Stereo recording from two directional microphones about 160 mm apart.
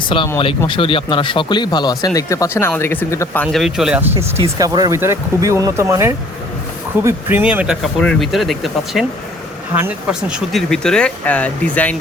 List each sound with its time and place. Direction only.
0.1 s speech: 35° left (ahead or behind); by 3.4 s 15° left (ahead or behind)
3.4 s speech: centre (ahead or behind)
4.4 s speech: 25° right (ahead or behind); by 11.9 s 10° left (ahead or behind)